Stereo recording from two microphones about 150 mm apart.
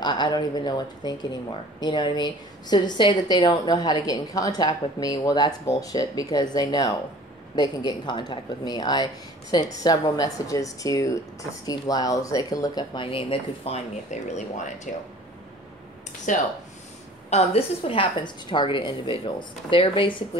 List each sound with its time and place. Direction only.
0.0 s speech: 30° left (ahead or behind)
14.1 s speech: 50° left (ahead or behind)
16.3 s speech: 60° left (ahead or behind)
17.3 s a woman's voice: 40° left (ahead or behind)